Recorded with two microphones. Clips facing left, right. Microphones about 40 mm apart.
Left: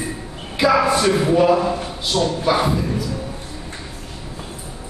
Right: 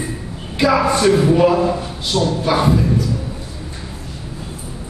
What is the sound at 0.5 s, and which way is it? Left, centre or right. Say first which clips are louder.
A man's voice: right 1 dB; centre.